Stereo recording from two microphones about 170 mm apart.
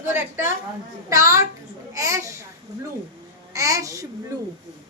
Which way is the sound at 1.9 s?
20° right (ahead or behind).